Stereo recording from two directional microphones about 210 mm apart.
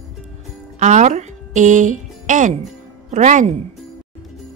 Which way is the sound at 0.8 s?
35° right (ahead or behind).